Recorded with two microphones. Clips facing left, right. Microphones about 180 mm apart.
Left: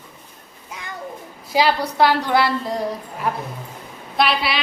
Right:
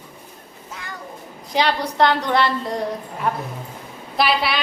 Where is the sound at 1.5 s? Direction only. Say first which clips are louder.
Left 1 dB; 5° left (ahead or behind).